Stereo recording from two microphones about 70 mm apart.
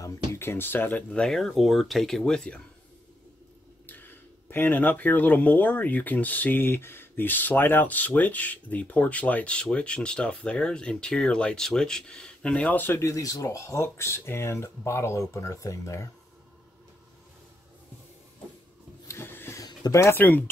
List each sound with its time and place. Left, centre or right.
0.0 s speech: left
1.2 s speech: centre
3.8 s speech: left
13.0 s speech: left
19.0 s a sound: left
19.9 s speech: left
20.2 s speech: left